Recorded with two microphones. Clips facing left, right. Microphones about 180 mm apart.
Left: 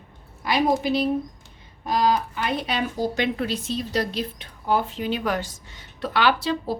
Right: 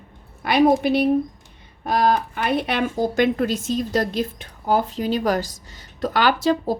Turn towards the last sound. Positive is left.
turn(degrees=-45)  # may be behind; listen again after turning